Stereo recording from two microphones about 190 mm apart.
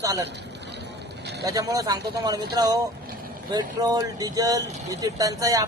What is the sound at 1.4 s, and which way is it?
Speech, 20° right (ahead or behind).